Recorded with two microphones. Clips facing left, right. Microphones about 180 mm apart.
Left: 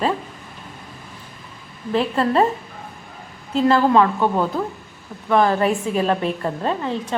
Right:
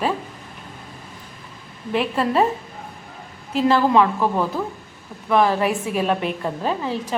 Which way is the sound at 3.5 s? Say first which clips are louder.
Left 1 dB; centre (ahead or behind).